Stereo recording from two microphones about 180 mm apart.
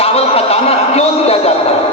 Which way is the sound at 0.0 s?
35° left (ahead or behind).